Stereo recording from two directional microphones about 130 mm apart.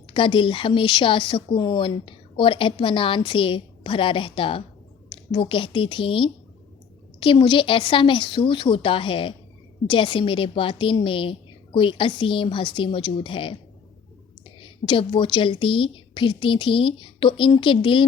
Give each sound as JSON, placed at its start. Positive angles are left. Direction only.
{"t": 0.1, "sound": "a woman's voice", "side_deg": 40}